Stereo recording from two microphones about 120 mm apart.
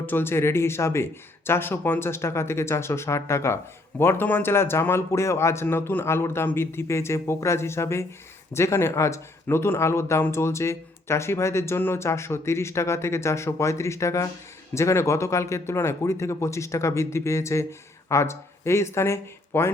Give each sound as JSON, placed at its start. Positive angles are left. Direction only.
{"t": 0.0, "sound": "speech", "side_deg": 15}